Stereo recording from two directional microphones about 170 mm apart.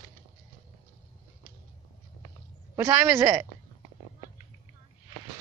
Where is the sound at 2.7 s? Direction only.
20° right (ahead or behind).